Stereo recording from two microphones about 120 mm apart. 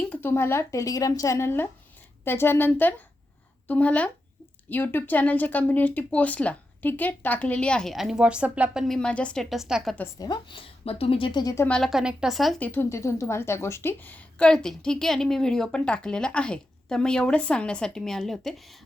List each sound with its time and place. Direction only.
0.1 s a woman's voice: 20° left (ahead or behind); by 8.8 s 10° right (ahead or behind)
8.9 s a woman's voice: 10° left (ahead or behind)
10.2 s a woman's voice: 40° left (ahead or behind)
10.8 s speech: 55° left (ahead or behind)
11.7 s a woman's voice: centre (ahead or behind)
12.5 s a woman's voice: 15° left (ahead or behind)